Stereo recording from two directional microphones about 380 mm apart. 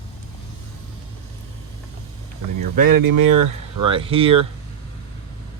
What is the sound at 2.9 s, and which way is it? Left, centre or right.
Speech, right.